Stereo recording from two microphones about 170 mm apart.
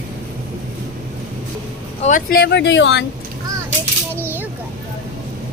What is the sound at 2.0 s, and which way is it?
Speech, 55° left (ahead or behind).